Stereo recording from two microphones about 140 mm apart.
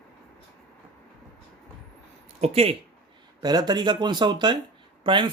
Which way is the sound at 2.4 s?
45° right (ahead or behind).